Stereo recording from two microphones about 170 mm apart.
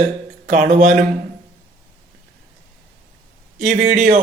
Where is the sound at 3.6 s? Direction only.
50° right (ahead or behind).